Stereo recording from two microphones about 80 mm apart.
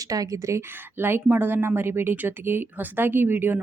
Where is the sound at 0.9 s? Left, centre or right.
Right.